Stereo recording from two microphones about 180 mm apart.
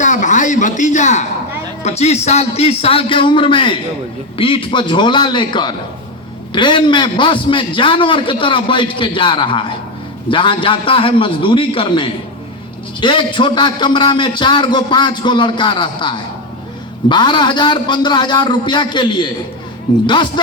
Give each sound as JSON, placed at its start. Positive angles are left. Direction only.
{"t": 0.0, "sound": "a man's voice", "side_deg": 45}